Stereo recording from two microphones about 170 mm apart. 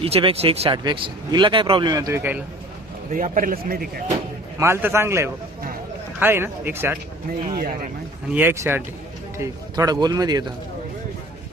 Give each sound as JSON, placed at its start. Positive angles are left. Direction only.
{"t": 0.0, "sound": "speech", "side_deg": -35}
{"t": 3.1, "sound": "speech", "side_deg": -50}
{"t": 4.6, "sound": "speech", "side_deg": -15}
{"t": 8.3, "sound": "speech", "side_deg": -10}